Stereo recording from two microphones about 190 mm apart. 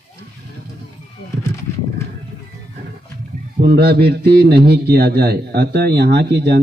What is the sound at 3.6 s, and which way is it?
A man's voice, 55° right (ahead or behind).